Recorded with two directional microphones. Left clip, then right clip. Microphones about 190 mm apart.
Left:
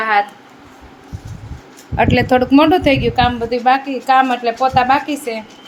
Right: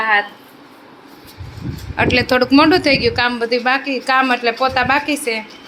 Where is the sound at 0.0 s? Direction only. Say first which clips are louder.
Left 1 dB; 10° left (ahead or behind).